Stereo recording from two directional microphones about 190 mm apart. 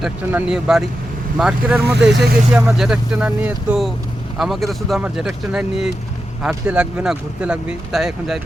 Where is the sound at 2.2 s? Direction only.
5° right (ahead or behind).